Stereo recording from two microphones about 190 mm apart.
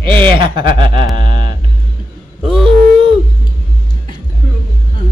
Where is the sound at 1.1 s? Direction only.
25° right (ahead or behind).